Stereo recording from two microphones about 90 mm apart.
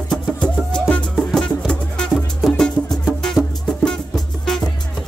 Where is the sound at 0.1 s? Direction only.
10° left (ahead or behind).